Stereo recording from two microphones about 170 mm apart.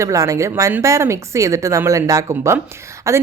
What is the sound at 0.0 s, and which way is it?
A woman's voice, 20° right (ahead or behind).